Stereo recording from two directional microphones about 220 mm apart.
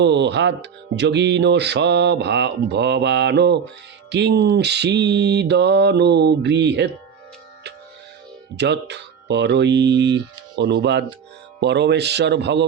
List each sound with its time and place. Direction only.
0.0 s music: 50° right (ahead or behind)
8.5 s music: 50° right (ahead or behind)